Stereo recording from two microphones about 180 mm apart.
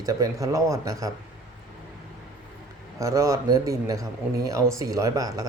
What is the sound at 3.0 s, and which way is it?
Speech, 15° right (ahead or behind).